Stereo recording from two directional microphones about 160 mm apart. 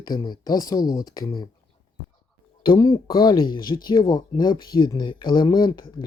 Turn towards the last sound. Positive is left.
turn(degrees=25)  # may be behind; listen again after turning